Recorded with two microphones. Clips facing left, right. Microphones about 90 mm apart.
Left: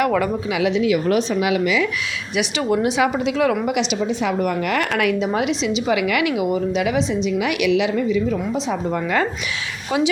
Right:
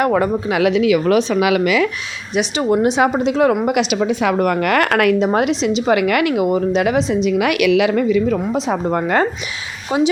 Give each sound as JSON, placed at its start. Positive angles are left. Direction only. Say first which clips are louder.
{"t": 0.0, "sound": "a woman's voice", "louder": "right 3 dB", "side_deg": -35}
{"t": 0.5, "sound": "a woman's voice", "louder": "right 4 dB", "side_deg": -65}
{"t": 2.3, "sound": "a woman's voice", "louder": "right 4 dB", "side_deg": -35}
{"t": 3.7, "sound": "a woman's voice", "louder": "right 4 dB", "side_deg": -55}
{"t": 4.0, "sound": "a woman's voice", "louder": "right 4 dB", "side_deg": -65}
{"t": 7.3, "sound": "a woman's voice", "louder": "right 4 dB", "side_deg": -60}
{"t": 9.9, "sound": "a woman's voice", "louder": "right 3 dB", "side_deg": -30}